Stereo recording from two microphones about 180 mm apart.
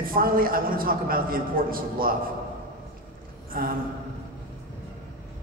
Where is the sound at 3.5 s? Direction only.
55° right (ahead or behind).